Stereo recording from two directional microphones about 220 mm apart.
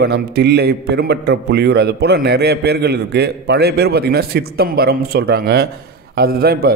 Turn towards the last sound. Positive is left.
turn(degrees=-45)  # may be behind; listen again after turning